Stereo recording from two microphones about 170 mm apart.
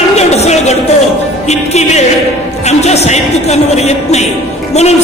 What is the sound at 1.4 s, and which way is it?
Music, 40° left (ahead or behind).